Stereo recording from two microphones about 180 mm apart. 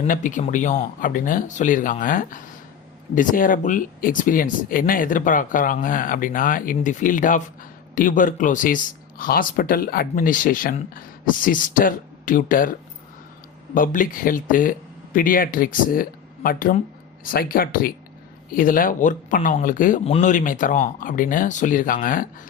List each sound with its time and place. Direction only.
0.1 s speech: 45° left (ahead or behind)
13.7 s speech: 50° left (ahead or behind)